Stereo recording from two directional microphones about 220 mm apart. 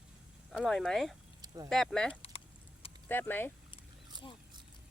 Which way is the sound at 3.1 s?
10° left (ahead or behind).